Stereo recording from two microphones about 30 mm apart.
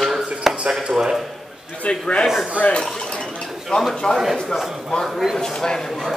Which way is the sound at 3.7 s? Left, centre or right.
Left.